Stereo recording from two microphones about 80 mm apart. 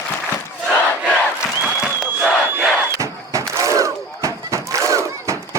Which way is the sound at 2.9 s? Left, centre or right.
Right.